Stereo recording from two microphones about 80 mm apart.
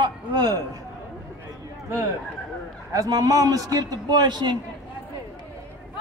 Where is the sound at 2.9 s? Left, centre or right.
Right.